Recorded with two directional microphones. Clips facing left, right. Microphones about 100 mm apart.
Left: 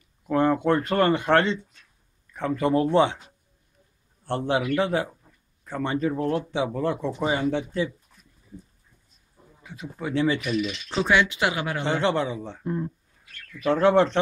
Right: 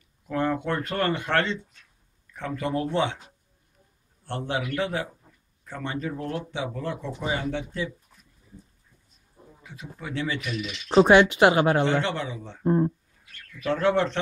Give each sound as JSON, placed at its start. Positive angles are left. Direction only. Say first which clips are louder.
{"t": 0.3, "sound": "speech", "louder": "left 5 dB", "side_deg": 30}
{"t": 4.5, "sound": "speech", "louder": "left 5 dB", "side_deg": 30}
{"t": 9.9, "sound": "speech", "louder": "left 6 dB", "side_deg": 30}
{"t": 10.9, "sound": "speech", "louder": "right 7 dB", "side_deg": -45}
{"t": 12.0, "sound": "speech", "louder": "left 5 dB", "side_deg": 30}
{"t": 12.6, "sound": "speech", "louder": "right 8 dB", "side_deg": -40}
{"t": 13.7, "sound": "speech", "louder": "left 4 dB", "side_deg": 30}